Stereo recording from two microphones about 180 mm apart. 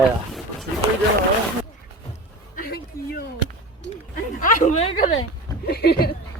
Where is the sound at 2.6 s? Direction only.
60° left (ahead or behind).